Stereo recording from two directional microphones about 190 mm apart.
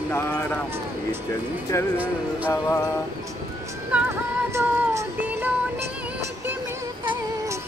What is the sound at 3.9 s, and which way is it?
Music, 10° right (ahead or behind).